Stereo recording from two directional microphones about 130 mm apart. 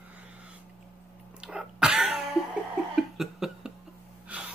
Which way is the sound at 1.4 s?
5° right (ahead or behind).